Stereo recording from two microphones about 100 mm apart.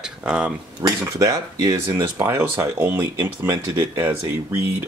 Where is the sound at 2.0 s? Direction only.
25° right (ahead or behind).